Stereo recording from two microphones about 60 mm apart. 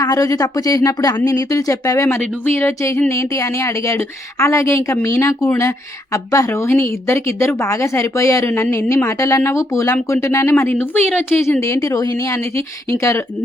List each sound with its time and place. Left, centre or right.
0.0 s speech: left
2.1 s speech: left
6.6 s speech: left
10.6 s a woman's voice: left
11.6 s speech: left
12.5 s speech: left